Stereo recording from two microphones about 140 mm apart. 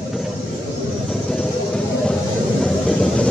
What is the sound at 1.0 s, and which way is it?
Vehicle, 5° left (ahead or behind).